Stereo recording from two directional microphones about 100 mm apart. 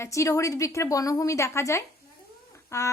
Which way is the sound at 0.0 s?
30° left (ahead or behind).